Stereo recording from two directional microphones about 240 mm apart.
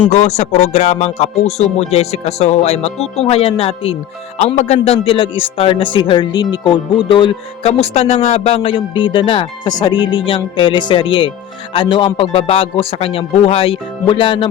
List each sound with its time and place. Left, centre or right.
0.1 s a man's voice: left